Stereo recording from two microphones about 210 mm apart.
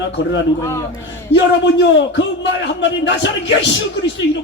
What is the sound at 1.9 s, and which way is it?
A man's voice, 60° left (ahead or behind).